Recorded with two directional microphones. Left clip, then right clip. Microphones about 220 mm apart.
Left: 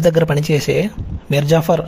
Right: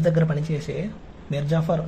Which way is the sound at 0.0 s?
40° left (ahead or behind).